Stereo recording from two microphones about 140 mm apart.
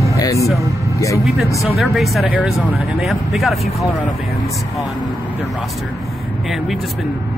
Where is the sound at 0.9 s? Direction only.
25° left (ahead or behind).